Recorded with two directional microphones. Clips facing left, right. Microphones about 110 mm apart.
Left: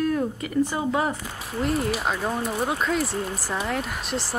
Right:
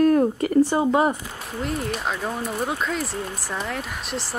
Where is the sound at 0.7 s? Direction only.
30° right (ahead or behind).